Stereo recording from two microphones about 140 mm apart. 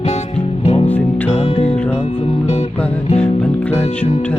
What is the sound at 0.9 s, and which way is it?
Music, 10° left (ahead or behind).